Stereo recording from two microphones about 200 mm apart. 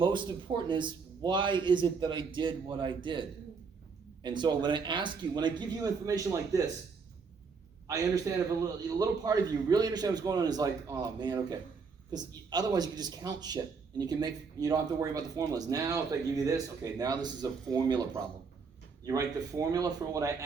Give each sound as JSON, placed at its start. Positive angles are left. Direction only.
{"t": 0.0, "sound": "speech", "side_deg": -25}
{"t": 7.9, "sound": "speech", "side_deg": -15}